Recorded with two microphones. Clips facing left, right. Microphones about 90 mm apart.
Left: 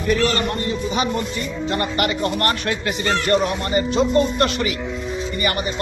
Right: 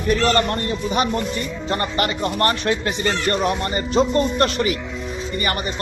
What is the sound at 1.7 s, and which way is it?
Speech, 35° right (ahead or behind).